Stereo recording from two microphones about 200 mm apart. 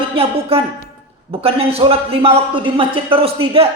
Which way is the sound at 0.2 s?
30° right (ahead or behind).